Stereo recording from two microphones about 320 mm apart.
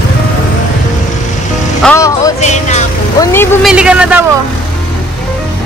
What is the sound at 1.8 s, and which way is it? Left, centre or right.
Music, centre.